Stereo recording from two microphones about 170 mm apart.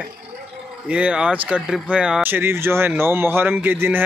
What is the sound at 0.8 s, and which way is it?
Speech, 5° right (ahead or behind).